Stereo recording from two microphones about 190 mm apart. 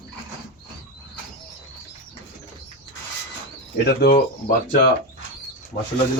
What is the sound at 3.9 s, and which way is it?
Speech, 55° left (ahead or behind).